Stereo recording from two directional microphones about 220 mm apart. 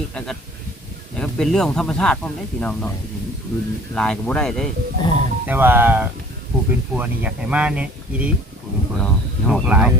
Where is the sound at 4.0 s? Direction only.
5° left (ahead or behind).